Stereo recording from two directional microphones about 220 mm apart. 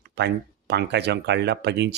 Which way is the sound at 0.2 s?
50° right (ahead or behind).